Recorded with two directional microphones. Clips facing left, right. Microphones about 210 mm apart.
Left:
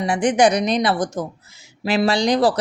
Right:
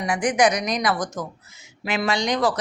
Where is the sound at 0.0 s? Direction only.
30° left (ahead or behind).